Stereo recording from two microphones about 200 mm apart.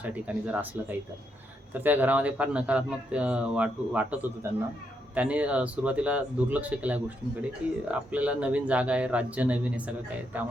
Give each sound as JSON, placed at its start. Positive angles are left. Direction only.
{"t": 0.0, "sound": "speech", "side_deg": -5}